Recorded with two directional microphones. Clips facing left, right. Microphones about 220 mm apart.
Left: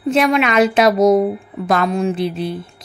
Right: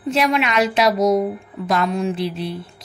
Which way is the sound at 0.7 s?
50° left (ahead or behind).